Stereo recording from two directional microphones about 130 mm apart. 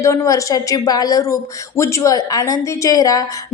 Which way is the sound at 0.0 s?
25° left (ahead or behind).